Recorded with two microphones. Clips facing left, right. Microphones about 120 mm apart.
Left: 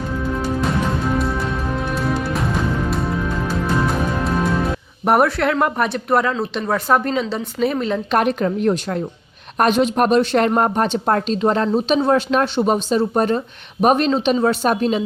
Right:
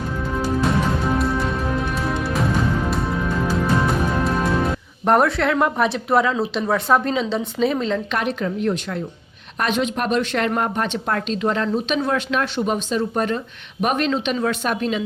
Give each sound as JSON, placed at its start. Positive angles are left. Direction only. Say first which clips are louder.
{"t": 0.4, "sound": "music", "louder": "right 2 dB", "side_deg": 0}
{"t": 5.0, "sound": "speech", "louder": "left 1 dB", "side_deg": 5}
{"t": 8.1, "sound": "a woman's voice", "louder": "left 5 dB", "side_deg": 50}